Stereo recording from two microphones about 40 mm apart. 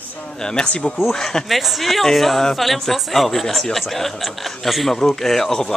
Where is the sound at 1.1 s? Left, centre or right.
Centre.